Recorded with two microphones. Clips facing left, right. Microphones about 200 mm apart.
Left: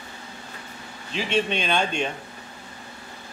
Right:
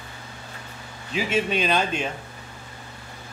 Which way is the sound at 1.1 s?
5° right (ahead or behind).